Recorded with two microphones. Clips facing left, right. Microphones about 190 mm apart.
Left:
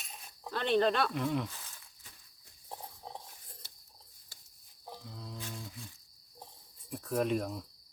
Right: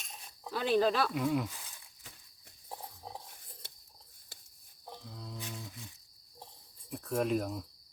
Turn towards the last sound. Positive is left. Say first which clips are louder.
# even
turn(degrees=0)  # may be behind; listen again after turning